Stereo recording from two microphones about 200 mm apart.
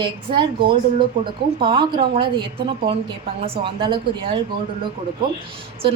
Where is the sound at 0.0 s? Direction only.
25° right (ahead or behind).